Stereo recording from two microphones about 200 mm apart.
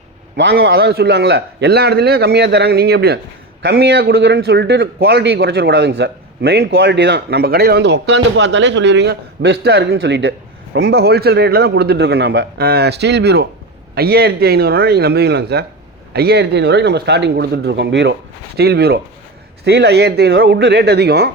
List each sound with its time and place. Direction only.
0.3 s a man's voice: 60° right (ahead or behind)